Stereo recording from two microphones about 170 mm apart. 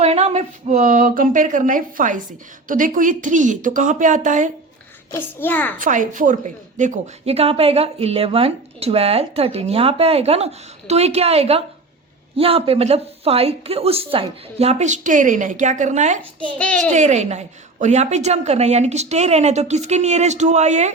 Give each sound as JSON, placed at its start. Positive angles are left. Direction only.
{"t": 0.0, "sound": "speech", "side_deg": -40}
{"t": 5.1, "sound": "a child's voice", "side_deg": 10}
{"t": 5.8, "sound": "speech", "side_deg": -50}
{"t": 16.6, "sound": "a child's voice", "side_deg": 5}
{"t": 16.9, "sound": "speech", "side_deg": -45}